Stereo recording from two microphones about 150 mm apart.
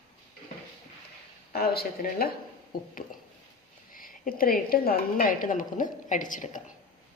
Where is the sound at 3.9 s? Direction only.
70° left (ahead or behind).